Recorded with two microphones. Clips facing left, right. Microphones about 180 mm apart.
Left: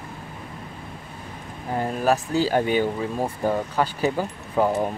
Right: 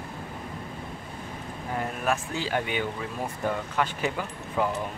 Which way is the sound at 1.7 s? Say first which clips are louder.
Left 6 dB; 35° left (ahead or behind).